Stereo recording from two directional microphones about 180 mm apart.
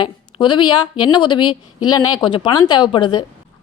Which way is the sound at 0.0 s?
25° left (ahead or behind).